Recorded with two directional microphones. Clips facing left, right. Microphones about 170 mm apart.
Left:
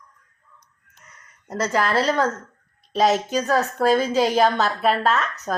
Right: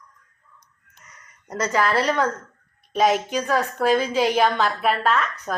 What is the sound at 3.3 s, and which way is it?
A woman's voice, 40° left (ahead or behind).